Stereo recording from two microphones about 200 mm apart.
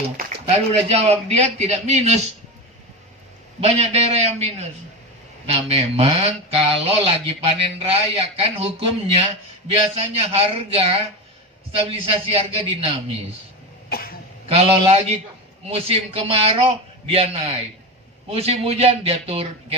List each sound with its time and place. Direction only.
0.4 s a man's voice: 30° right (ahead or behind)
3.6 s a man's voice: 30° right (ahead or behind)
13.9 s throat clearing: 50° left (ahead or behind)
14.4 s a man's voice: 30° right (ahead or behind)